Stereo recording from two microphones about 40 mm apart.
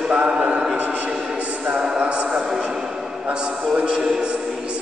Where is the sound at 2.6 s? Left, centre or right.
Centre.